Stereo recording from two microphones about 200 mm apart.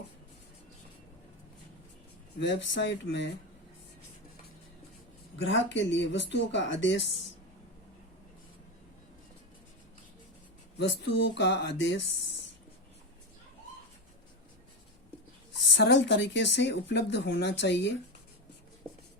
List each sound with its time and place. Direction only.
2.4 s speech: 65° left (ahead or behind)
5.4 s speech: 70° left (ahead or behind)
10.8 s speech: 65° left (ahead or behind)
15.7 s speech: 60° left (ahead or behind)